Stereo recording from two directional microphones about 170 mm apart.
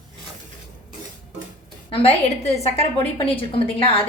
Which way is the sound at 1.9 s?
35° left (ahead or behind).